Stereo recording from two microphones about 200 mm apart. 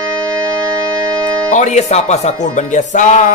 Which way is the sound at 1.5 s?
35° left (ahead or behind).